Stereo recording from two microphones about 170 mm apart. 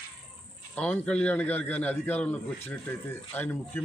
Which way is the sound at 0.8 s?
5° left (ahead or behind).